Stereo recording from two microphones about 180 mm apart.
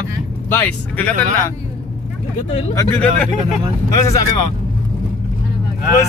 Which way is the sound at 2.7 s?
5° left (ahead or behind).